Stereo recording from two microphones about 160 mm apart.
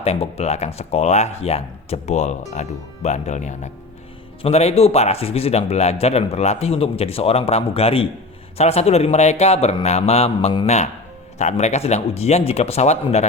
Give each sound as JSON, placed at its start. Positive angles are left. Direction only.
{"t": 0.0, "sound": "a man's voice", "side_deg": 40}